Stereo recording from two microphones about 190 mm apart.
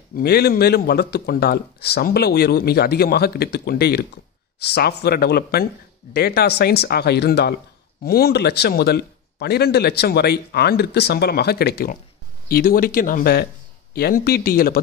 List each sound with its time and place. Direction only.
0.1 s speech: 55° left (ahead or behind)